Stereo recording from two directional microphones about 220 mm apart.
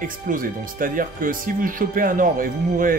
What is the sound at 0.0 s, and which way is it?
Speech, 40° right (ahead or behind).